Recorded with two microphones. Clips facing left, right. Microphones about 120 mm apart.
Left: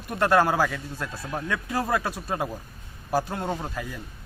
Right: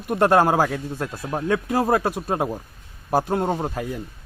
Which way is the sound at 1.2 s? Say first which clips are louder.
Right 8 dB; 30° right (ahead or behind).